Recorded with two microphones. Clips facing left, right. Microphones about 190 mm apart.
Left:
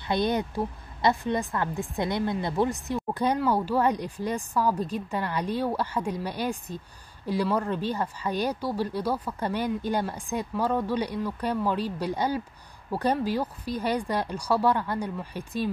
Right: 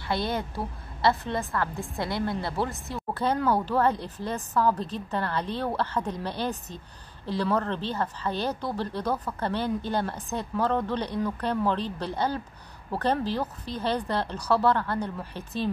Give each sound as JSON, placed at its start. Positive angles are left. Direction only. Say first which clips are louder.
{"t": 0.0, "sound": "speech", "louder": "left 3 dB", "side_deg": 20}